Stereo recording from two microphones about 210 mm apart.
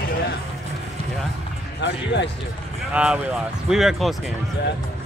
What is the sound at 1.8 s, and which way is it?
Speech, 55° left (ahead or behind).